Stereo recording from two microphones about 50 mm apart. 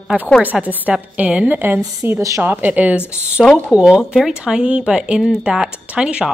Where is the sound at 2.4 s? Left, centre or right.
Right.